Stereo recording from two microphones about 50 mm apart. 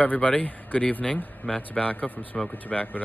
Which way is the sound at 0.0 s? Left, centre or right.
Left.